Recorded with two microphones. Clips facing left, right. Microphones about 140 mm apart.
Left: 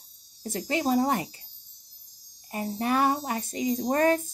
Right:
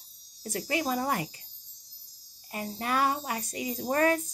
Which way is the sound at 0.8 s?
30° left (ahead or behind).